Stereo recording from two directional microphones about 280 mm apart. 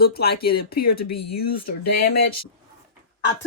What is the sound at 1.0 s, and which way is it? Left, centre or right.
Speech, left.